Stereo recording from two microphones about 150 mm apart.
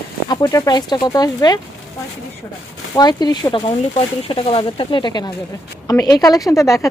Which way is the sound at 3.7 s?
40° left (ahead or behind).